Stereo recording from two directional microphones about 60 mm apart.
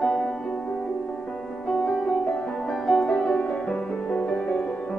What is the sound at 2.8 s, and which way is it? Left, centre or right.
Music, centre.